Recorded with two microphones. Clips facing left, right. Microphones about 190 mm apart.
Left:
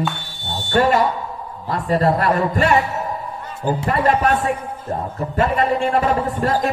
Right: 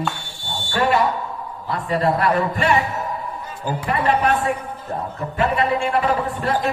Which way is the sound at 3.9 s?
45° left (ahead or behind).